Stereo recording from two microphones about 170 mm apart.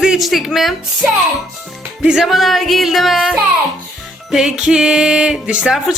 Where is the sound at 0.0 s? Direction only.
Centre (ahead or behind).